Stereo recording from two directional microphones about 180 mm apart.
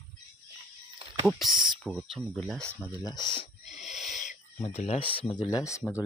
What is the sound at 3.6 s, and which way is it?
Owl, 40° left (ahead or behind).